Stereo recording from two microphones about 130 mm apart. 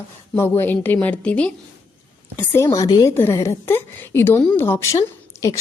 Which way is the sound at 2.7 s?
30° left (ahead or behind).